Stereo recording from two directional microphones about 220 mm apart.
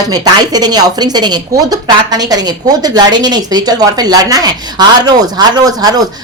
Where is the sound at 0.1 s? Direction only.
20° right (ahead or behind).